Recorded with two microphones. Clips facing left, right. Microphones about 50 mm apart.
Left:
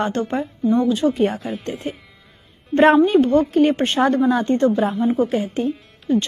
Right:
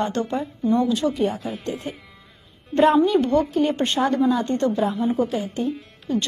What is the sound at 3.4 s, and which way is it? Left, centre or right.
A woman's voice, left.